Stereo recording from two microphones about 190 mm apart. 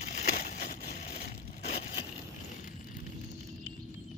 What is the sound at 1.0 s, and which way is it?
Crushing, 35° left (ahead or behind).